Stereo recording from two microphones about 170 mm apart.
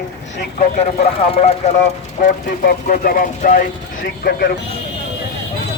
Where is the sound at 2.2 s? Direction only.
55° left (ahead or behind).